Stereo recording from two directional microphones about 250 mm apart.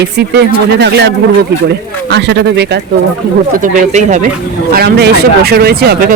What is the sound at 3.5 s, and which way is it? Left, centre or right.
Speech, right.